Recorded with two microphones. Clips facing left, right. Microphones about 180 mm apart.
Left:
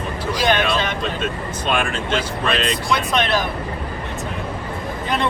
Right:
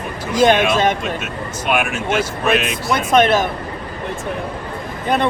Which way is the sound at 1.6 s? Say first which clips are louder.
Right 3 dB; 10° right (ahead or behind).